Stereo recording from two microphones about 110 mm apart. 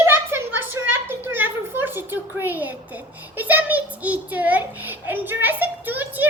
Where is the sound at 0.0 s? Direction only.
20° right (ahead or behind).